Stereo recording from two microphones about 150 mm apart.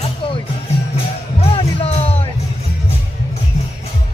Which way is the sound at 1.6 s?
40° left (ahead or behind).